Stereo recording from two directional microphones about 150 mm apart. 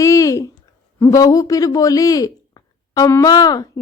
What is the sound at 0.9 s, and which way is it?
A woman's voice, 20° left (ahead or behind).